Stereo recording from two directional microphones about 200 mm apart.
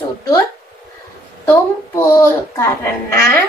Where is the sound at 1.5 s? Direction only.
15° left (ahead or behind).